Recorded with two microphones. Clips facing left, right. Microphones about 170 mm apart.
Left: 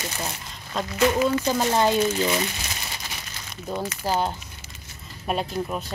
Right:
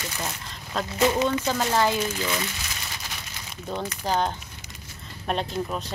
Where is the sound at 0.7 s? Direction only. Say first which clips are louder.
Even; centre (ahead or behind).